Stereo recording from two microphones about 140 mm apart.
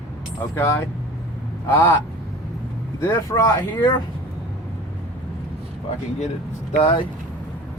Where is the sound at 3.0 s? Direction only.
25° left (ahead or behind).